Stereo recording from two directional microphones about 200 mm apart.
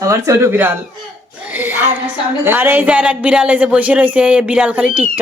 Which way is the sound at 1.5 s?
10° right (ahead or behind).